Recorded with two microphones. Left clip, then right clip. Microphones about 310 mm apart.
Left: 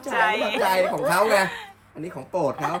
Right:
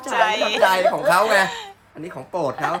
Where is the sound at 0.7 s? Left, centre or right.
Centre.